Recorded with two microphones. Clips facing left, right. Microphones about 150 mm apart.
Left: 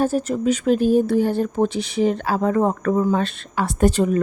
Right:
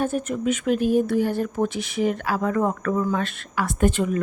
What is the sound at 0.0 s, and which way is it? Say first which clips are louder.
A woman's voice: left 4 dB; 35° left (ahead or behind).